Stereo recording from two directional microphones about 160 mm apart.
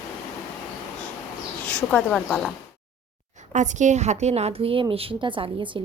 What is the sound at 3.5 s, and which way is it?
A woman's voice, 50° right (ahead or behind).